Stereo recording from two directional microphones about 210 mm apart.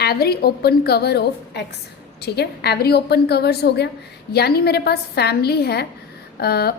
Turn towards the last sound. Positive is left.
turn(degrees=50)  # may be behind; listen again after turning